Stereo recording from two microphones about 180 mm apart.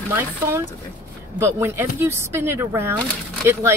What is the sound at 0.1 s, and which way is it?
Speech, 15° right (ahead or behind).